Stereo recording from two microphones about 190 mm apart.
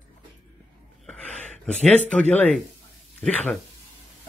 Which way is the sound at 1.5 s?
5° left (ahead or behind).